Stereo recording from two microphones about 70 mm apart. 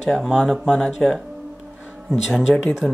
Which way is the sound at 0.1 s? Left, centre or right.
Centre.